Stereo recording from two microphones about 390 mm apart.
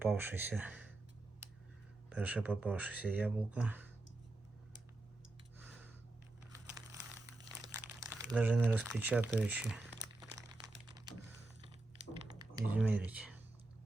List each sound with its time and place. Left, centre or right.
0.0 s speech: centre
2.0 s speech: centre
5.5 s a sound: centre
7.9 s crumpling: centre
12.4 s speech: centre